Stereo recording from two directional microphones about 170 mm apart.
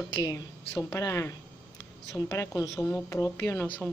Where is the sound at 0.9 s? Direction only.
20° left (ahead or behind).